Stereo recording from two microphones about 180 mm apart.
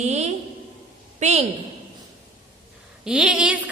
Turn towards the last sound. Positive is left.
turn(degrees=-5)  # may be behind; listen again after turning